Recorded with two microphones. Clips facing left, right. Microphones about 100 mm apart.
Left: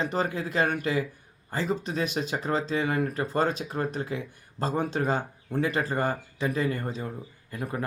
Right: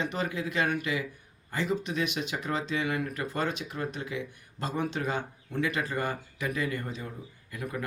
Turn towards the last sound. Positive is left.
turn(degrees=35)  # may be behind; listen again after turning